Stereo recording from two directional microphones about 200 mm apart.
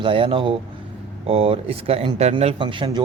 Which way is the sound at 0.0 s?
25° right (ahead or behind).